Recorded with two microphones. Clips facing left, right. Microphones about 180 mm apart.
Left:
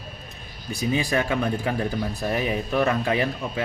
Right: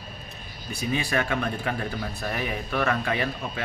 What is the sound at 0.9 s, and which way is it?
A man's voice, 25° left (ahead or behind).